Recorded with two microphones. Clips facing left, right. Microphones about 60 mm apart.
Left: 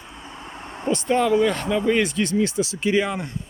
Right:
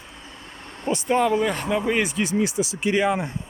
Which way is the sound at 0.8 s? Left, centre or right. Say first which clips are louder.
Left 1 dB; centre.